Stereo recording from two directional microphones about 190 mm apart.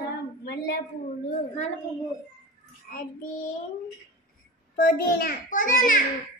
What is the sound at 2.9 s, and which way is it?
Child singing, 45° left (ahead or behind).